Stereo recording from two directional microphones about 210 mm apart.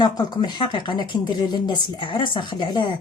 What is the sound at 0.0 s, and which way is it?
Speech, 20° left (ahead or behind).